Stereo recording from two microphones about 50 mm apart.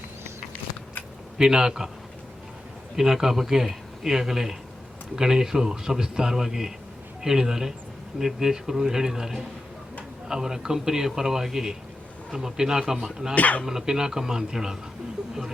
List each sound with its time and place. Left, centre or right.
1.4 s a man's voice: centre
2.9 s a man's voice: centre
13.3 s speech: left
13.7 s a man's voice: centre